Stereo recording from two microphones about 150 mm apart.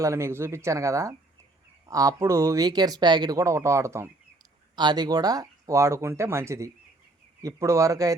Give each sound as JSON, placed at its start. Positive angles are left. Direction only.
{"t": 0.0, "sound": "speech", "side_deg": -20}
{"t": 4.7, "sound": "speech", "side_deg": -30}